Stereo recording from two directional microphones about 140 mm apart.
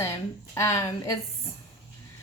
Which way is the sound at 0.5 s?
20° left (ahead or behind).